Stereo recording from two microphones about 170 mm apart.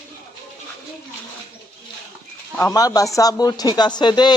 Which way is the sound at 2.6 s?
20° left (ahead or behind).